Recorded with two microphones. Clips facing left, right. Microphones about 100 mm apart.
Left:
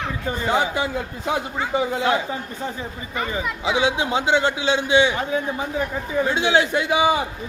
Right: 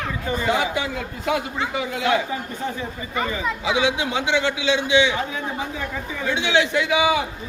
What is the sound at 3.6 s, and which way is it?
A man's voice, 30° left (ahead or behind).